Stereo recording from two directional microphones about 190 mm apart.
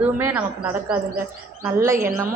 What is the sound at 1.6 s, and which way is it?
Speech, 15° right (ahead or behind).